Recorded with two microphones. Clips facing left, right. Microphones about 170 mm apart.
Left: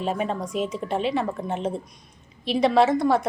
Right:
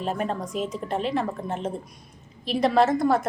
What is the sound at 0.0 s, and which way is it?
A woman's voice, centre (ahead or behind).